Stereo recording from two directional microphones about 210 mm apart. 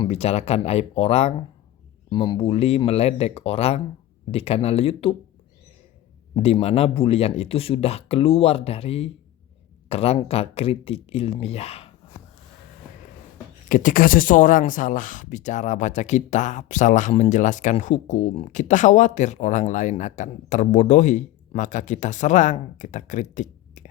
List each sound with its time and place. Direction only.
0.0 s speech: 30° left (ahead or behind)
6.3 s speech: 25° left (ahead or behind)
13.7 s speech: 40° left (ahead or behind)